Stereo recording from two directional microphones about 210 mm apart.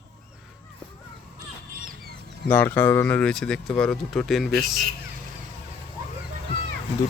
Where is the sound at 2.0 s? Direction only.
50° left (ahead or behind).